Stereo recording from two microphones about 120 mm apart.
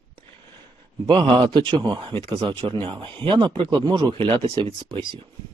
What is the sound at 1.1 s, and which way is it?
A man's voice, 45° right (ahead or behind).